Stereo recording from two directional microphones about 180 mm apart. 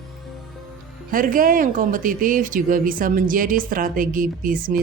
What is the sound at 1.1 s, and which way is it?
Speech, 50° right (ahead or behind).